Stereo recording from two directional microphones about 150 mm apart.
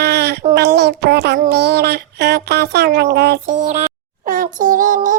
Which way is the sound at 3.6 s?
55° right (ahead or behind).